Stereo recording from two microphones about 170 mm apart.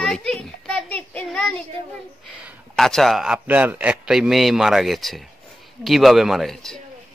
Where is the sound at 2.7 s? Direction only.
Centre (ahead or behind).